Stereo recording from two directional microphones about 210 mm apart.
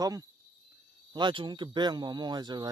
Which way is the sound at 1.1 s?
20° right (ahead or behind).